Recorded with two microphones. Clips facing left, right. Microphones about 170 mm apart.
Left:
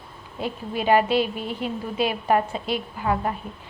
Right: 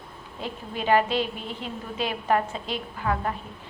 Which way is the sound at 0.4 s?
10° left (ahead or behind).